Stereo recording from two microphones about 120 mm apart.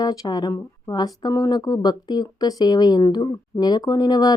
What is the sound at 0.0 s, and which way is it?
Speech, 30° left (ahead or behind).